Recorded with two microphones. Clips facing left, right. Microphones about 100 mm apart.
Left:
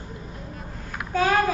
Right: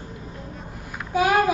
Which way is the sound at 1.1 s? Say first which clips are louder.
Right 2 dB; 15° right (ahead or behind).